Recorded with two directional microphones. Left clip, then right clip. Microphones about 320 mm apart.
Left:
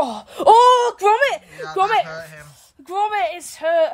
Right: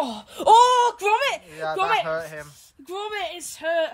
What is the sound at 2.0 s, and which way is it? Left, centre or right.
Speech, centre.